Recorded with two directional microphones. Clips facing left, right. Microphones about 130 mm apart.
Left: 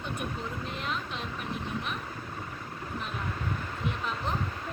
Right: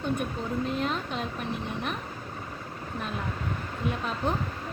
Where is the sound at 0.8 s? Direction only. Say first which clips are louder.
Right 5 dB; 40° right (ahead or behind).